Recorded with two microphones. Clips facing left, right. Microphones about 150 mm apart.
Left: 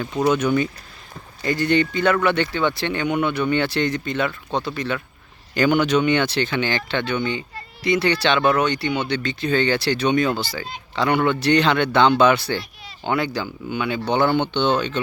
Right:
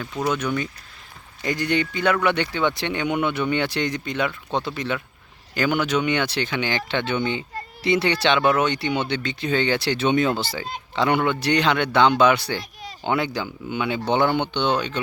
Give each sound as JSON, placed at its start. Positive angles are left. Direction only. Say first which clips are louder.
{"t": 0.0, "sound": "speech", "louder": "left 5 dB", "side_deg": 20}
{"t": 0.3, "sound": "speech", "louder": "left 6 dB", "side_deg": 5}
{"t": 1.5, "sound": "speech", "louder": "left 4 dB", "side_deg": -15}
{"t": 5.5, "sound": "speech", "louder": "left 4 dB", "side_deg": -5}